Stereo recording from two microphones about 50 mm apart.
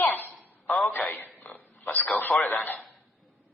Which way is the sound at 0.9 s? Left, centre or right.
Left.